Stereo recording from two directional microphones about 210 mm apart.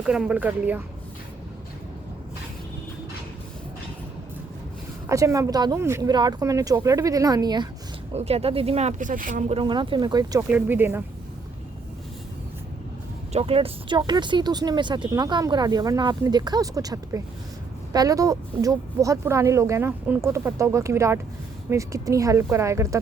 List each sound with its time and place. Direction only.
0.0 s a woman's voice: 5° right (ahead or behind)
5.0 s a woman's voice: 15° right (ahead or behind)
8.1 s a woman's voice: 30° right (ahead or behind); by 11.0 s 10° right (ahead or behind)
13.3 s a woman's voice: 25° right (ahead or behind)